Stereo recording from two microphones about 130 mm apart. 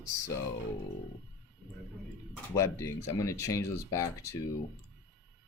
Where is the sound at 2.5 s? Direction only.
25° left (ahead or behind).